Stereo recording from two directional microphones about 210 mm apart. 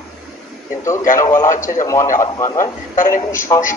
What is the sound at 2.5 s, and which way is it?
Speech, 40° left (ahead or behind).